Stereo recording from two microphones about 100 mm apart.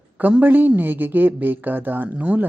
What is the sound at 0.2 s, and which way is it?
A woman's voice, 15° right (ahead or behind).